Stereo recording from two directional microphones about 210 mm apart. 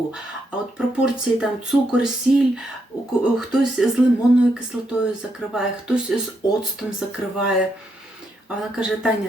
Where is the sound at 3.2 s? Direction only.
5° right (ahead or behind).